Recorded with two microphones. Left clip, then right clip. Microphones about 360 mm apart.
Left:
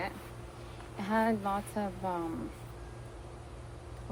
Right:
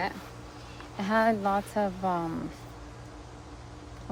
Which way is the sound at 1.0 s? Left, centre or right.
Right.